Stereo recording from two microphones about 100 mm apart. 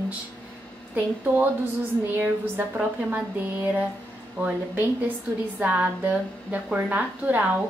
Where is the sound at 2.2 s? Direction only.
15° right (ahead or behind).